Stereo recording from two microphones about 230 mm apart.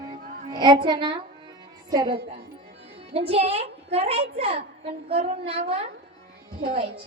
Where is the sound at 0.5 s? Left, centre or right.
Centre.